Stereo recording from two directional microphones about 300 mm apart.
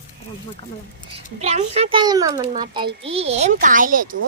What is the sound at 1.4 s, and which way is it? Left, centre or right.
A child's voice, right.